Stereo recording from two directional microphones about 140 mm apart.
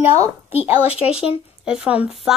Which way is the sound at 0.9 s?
10° right (ahead or behind).